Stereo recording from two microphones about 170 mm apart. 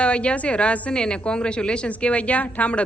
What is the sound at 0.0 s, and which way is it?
A woman's voice, 5° left (ahead or behind).